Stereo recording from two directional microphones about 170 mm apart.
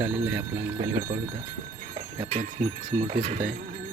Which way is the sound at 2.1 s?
35° right (ahead or behind).